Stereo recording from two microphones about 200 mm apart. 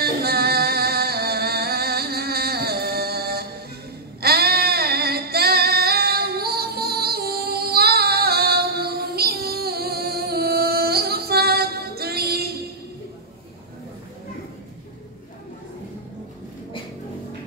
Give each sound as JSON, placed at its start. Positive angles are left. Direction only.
{"t": 0.0, "sound": "singing", "side_deg": -50}
{"t": 4.2, "sound": "female singing", "side_deg": -50}